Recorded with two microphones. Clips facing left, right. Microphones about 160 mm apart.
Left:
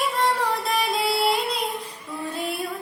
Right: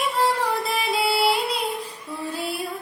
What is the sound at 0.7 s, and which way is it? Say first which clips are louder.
Music: even; 5° right (ahead or behind).